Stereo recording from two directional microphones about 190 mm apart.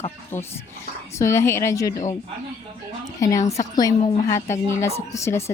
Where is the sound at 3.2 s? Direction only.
15° left (ahead or behind).